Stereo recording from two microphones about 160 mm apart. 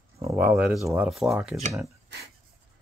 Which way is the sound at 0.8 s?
20° right (ahead or behind).